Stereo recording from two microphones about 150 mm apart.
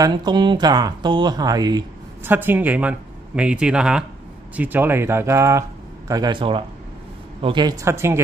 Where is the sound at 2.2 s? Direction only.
15° right (ahead or behind).